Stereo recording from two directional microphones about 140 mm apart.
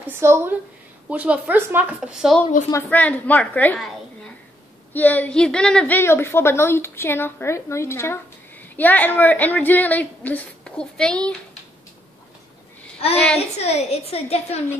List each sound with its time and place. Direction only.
0.1 s speech: 15° right (ahead or behind)
2.6 s a woman's voice: 75° left (ahead or behind)
2.9 s a woman's voice: 10° left (ahead or behind)
4.9 s a woman's voice: 10° left (ahead or behind)
13.4 s a woman's voice: 50° left (ahead or behind)